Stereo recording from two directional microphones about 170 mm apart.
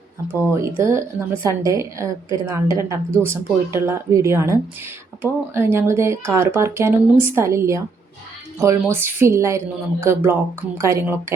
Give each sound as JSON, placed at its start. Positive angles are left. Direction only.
{"t": 0.3, "sound": "a woman's voice", "side_deg": -15}